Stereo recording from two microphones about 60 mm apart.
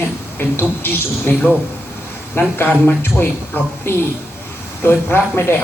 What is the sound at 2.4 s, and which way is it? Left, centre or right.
Speech, left.